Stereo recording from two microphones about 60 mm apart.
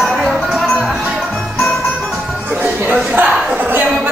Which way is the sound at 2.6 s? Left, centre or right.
Right.